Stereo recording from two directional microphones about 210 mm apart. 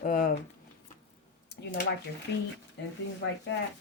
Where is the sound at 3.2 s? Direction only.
60° left (ahead or behind).